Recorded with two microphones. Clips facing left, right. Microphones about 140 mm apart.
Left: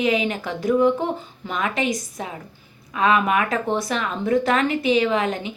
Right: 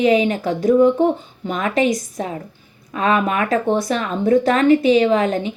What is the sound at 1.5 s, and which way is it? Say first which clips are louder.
Speech: right 5 dB; 40° right (ahead or behind).